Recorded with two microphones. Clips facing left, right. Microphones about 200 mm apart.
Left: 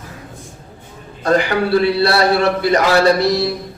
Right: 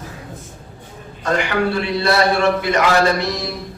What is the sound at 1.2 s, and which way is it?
Speech, 35° left (ahead or behind).